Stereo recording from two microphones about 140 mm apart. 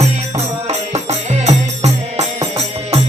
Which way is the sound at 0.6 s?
50° right (ahead or behind).